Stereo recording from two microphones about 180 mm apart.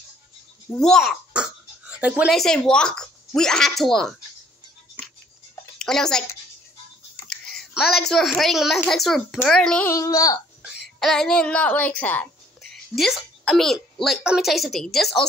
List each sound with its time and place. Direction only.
0.7 s a child's voice: 5° left (ahead or behind)
5.8 s speech: 5° left (ahead or behind)
7.5 s a woman's voice: centre (ahead or behind)
9.9 s speech: 20° left (ahead or behind)
10.6 s a woman's voice: centre (ahead or behind)